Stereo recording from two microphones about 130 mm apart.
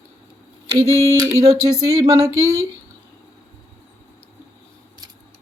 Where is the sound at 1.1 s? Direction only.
25° right (ahead or behind).